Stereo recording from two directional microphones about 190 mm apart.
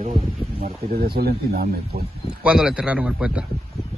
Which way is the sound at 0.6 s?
55° right (ahead or behind).